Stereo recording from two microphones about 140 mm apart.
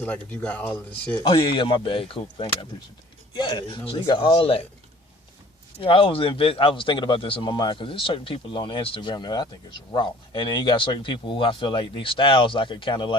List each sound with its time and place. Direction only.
0.0 s speech: 10° left (ahead or behind)
1.2 s speech: 40° left (ahead or behind)
5.8 s speech: 40° left (ahead or behind)